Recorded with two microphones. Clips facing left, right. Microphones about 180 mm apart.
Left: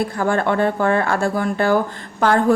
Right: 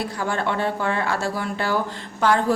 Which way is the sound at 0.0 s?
50° left (ahead or behind).